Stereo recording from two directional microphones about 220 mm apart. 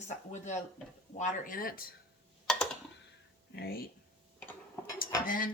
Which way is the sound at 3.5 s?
45° left (ahead or behind).